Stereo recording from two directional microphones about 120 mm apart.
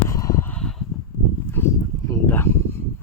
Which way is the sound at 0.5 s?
5° left (ahead or behind).